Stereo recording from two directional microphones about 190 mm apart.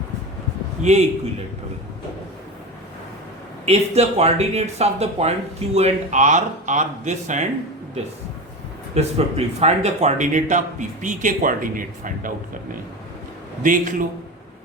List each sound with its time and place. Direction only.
0.8 s speech: 35° right (ahead or behind)
3.7 s speech: 35° right (ahead or behind)
9.0 s speech: 35° right (ahead or behind)
13.6 s a man's voice: 45° right (ahead or behind)